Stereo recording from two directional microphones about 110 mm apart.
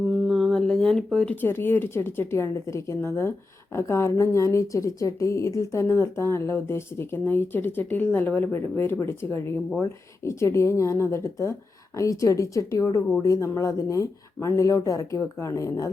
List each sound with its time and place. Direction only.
0.1 s speech: centre (ahead or behind); by 15.9 s 30° left (ahead or behind)